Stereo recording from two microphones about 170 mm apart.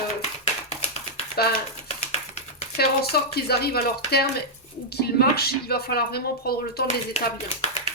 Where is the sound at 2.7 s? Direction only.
65° left (ahead or behind).